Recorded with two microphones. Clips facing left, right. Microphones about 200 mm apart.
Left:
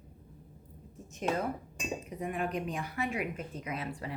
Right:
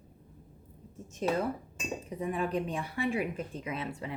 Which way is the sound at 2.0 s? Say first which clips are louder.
Right 4 dB; 30° right (ahead or behind).